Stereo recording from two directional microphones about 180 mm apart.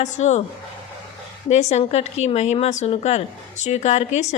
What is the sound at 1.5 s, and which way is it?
A woman's voice, 35° left (ahead or behind).